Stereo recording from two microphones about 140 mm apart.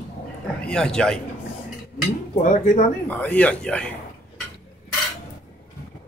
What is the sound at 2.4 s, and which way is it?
Speech, 65° left (ahead or behind).